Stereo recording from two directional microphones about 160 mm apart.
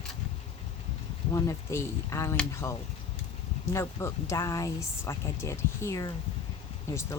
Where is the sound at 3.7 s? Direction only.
15° left (ahead or behind).